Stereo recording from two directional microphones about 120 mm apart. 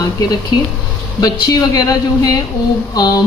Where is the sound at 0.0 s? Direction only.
35° left (ahead or behind).